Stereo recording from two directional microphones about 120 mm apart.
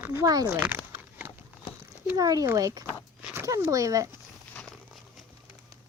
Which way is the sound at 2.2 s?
30° right (ahead or behind).